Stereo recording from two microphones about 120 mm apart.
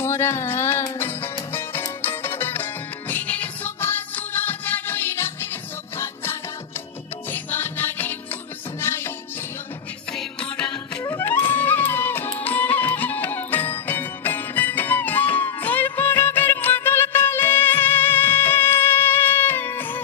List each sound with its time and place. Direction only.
0.0 s music: 20° left (ahead or behind)
7.3 s music: 15° left (ahead or behind)
10.1 s music: 5° left (ahead or behind)
11.0 s music: 25° left (ahead or behind)